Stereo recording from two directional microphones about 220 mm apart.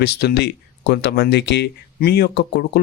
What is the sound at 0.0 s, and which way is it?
Speech, 50° left (ahead or behind).